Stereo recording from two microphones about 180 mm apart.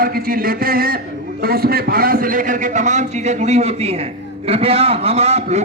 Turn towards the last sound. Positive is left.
turn(degrees=-35)  # may be behind; listen again after turning